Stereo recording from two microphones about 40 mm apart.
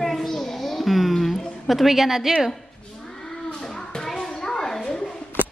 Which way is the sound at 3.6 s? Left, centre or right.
Centre.